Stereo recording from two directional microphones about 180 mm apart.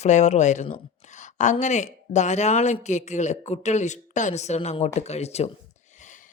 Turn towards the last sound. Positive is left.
turn(degrees=35)  # may be behind; listen again after turning